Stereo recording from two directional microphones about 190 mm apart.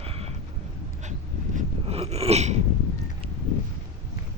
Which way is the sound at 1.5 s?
35° right (ahead or behind).